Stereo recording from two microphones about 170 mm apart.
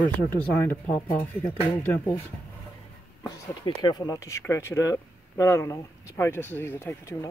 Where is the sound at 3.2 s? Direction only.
25° left (ahead or behind).